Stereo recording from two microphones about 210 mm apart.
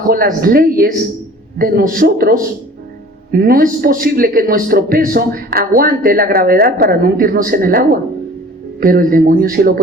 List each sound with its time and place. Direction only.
0.1 s a man's voice: 45° right (ahead or behind)